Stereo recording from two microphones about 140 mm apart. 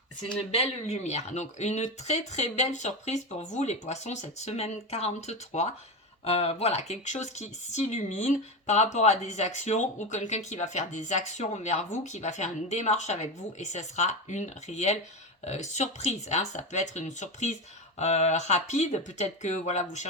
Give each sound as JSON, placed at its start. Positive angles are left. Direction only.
{"t": 0.5, "sound": "speech", "side_deg": 50}